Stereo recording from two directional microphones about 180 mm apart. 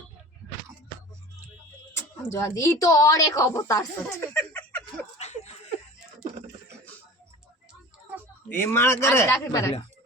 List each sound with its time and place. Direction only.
1.9 s speech: 15° left (ahead or behind)
5.2 s laughter: 40° left (ahead or behind)
8.4 s speech: 10° left (ahead or behind)